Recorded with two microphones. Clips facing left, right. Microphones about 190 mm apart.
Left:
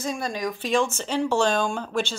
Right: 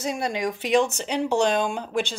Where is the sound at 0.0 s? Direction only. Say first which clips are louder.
Right 2 dB; 20° right (ahead or behind).